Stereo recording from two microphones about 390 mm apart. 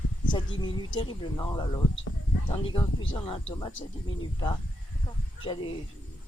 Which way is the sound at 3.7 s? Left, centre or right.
Left.